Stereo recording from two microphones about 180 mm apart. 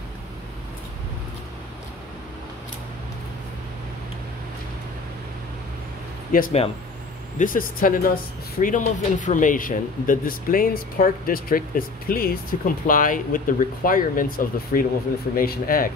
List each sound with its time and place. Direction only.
6.3 s speech: 55° left (ahead or behind)